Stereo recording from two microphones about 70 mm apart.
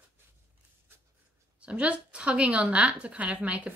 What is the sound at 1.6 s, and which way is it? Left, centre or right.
Speech, centre.